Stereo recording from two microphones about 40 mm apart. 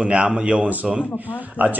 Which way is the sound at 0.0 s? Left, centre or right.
Right.